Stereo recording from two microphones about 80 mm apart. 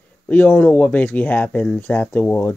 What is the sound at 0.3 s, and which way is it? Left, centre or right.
Speech, centre.